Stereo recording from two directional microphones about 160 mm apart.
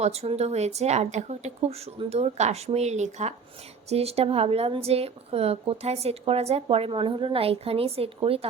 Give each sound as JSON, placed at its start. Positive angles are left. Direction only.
{"t": 0.0, "sound": "speech", "side_deg": -40}